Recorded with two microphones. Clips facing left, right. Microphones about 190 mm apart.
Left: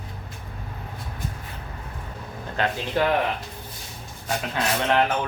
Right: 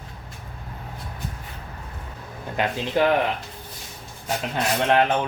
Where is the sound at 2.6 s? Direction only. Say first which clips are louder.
Right 2 dB; 15° right (ahead or behind).